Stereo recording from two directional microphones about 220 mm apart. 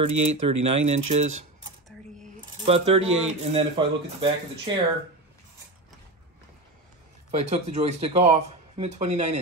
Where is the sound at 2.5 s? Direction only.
25° right (ahead or behind).